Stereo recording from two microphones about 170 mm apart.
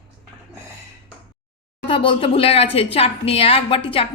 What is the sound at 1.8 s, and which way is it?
A woman's voice, 30° left (ahead or behind).